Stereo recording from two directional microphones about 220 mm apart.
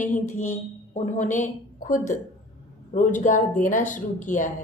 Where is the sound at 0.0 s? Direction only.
35° left (ahead or behind).